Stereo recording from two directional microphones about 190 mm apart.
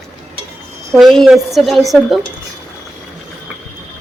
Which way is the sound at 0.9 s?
Centre (ahead or behind).